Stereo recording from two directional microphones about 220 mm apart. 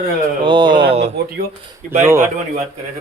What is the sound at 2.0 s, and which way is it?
Speech, 10° right (ahead or behind).